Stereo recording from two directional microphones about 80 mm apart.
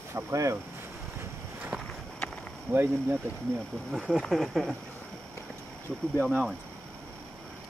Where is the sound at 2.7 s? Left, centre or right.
Right.